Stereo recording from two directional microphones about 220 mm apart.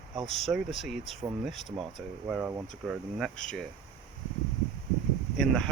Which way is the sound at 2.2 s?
5° right (ahead or behind).